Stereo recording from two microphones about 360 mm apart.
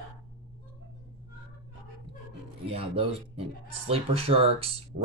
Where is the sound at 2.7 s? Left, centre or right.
Centre.